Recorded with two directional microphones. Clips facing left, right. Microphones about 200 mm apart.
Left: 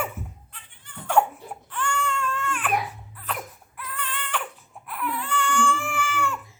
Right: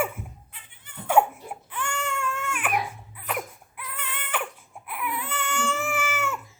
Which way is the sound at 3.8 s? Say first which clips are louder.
Left 3 dB; 10° right (ahead or behind).